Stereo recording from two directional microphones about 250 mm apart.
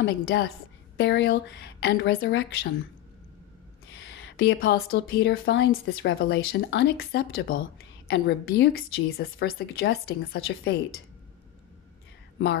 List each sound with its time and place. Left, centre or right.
0.0 s speech: left
3.9 s a woman's voice: left